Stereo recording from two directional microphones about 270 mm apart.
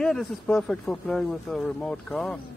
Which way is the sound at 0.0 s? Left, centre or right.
Centre.